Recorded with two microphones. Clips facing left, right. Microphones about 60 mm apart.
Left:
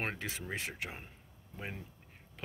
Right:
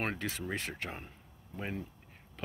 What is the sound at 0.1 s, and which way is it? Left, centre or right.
Speech, centre.